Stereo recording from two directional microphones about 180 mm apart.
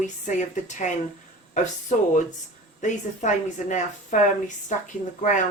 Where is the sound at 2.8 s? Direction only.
40° left (ahead or behind).